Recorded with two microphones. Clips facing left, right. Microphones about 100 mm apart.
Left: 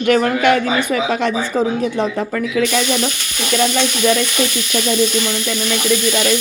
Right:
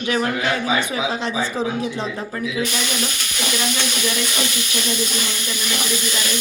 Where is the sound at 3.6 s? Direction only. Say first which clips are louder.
Left 10 dB; 80° left.